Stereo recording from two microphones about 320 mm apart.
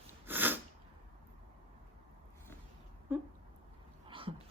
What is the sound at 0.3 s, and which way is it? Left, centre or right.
Sneeze, centre.